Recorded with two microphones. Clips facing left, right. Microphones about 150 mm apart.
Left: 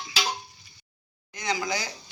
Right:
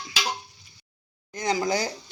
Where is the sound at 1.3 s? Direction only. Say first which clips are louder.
Right 5 dB; 45° right (ahead or behind).